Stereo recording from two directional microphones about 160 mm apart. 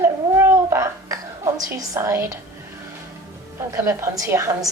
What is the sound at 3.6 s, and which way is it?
A woman's voice, 20° right (ahead or behind).